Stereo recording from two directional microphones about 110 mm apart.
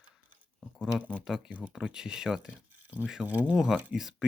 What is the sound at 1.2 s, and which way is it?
Speech, 5° right (ahead or behind).